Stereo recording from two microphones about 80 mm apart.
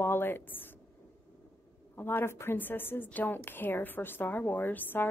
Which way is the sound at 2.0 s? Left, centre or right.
Left.